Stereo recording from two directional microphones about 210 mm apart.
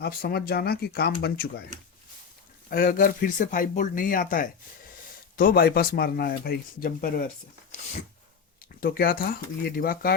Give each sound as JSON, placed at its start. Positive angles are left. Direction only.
{"t": 0.0, "sound": "speech", "side_deg": 45}
{"t": 2.6, "sound": "speech", "side_deg": 40}
{"t": 8.8, "sound": "speech", "side_deg": 45}